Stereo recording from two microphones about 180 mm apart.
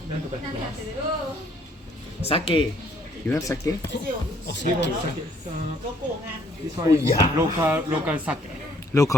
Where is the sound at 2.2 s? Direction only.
30° left (ahead or behind).